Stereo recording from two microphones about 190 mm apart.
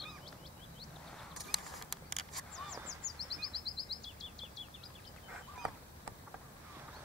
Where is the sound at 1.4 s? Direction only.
Centre (ahead or behind).